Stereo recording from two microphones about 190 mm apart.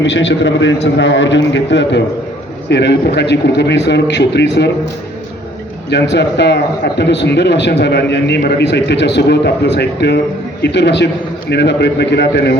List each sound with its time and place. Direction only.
0.0 s a man's voice: 70° left (ahead or behind)
5.9 s a man's voice: 65° left (ahead or behind)